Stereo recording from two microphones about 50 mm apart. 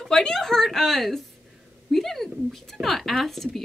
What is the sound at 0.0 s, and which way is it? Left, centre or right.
Speech, centre.